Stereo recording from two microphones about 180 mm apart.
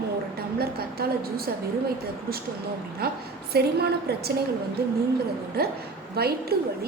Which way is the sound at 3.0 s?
60° right (ahead or behind).